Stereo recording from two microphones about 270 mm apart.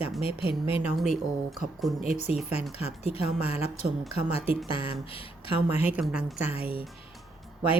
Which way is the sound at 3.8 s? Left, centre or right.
Centre.